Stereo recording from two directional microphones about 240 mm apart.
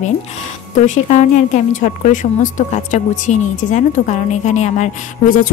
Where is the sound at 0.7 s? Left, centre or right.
Left.